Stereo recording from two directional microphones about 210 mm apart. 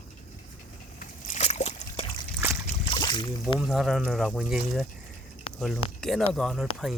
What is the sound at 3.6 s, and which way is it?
Speech, centre (ahead or behind).